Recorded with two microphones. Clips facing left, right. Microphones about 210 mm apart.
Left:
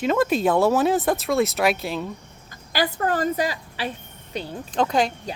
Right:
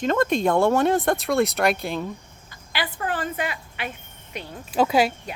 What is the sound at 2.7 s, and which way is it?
Speech, 40° left (ahead or behind).